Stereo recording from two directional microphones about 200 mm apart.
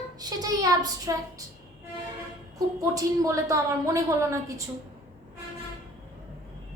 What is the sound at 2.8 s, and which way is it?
A woman's voice, 15° right (ahead or behind).